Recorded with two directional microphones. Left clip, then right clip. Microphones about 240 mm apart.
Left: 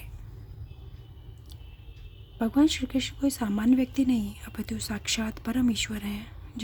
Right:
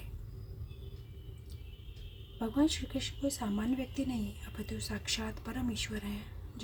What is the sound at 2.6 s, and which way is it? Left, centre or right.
Speech, left.